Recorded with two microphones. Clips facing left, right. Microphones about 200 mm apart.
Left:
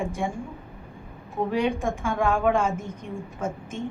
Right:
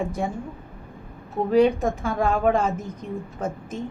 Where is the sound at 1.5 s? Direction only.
40° right (ahead or behind).